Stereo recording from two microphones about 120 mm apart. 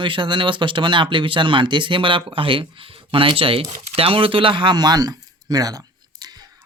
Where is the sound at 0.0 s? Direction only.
40° right (ahead or behind).